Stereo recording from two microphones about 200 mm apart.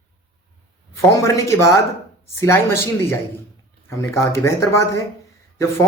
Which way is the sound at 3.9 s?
15° left (ahead or behind).